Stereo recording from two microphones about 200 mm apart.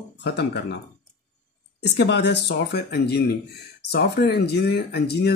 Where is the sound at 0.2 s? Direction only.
55° left (ahead or behind).